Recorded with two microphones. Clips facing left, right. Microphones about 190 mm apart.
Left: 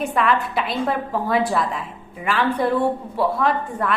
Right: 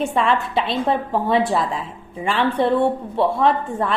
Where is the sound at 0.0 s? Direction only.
25° right (ahead or behind).